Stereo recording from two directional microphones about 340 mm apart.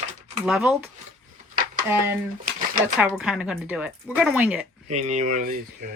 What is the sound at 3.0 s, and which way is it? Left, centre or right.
Speech, centre.